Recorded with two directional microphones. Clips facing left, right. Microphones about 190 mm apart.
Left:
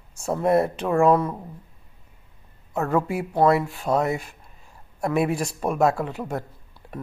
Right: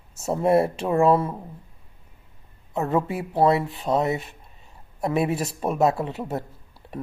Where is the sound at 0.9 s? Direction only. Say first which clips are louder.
Left 2 dB; 10° right (ahead or behind).